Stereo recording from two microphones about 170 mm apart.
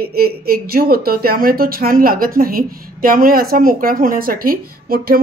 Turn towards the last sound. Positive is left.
turn(degrees=-60)  # may be behind; listen again after turning